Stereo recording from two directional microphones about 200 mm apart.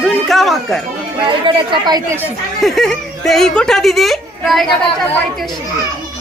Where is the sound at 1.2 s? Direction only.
25° right (ahead or behind).